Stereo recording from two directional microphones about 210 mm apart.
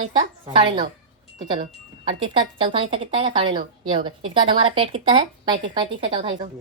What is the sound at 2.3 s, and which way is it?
A woman's voice, 25° right (ahead or behind).